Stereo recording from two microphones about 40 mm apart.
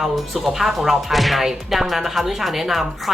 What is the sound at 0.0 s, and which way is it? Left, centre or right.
Speech, centre.